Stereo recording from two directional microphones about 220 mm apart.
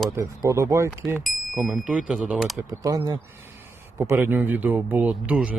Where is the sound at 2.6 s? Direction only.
15° right (ahead or behind).